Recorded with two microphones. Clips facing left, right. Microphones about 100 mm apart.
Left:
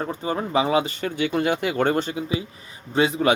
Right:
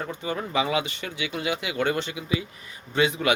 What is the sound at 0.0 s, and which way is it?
Speech, 40° left (ahead or behind).